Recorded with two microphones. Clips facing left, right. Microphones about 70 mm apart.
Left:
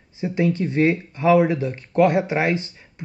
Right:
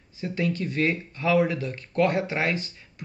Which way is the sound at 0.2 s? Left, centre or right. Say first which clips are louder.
Left 6 dB; left.